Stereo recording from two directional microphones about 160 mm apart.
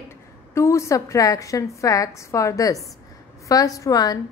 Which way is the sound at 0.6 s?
15° left (ahead or behind).